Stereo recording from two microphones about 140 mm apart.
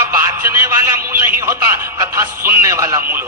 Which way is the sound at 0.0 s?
20° right (ahead or behind).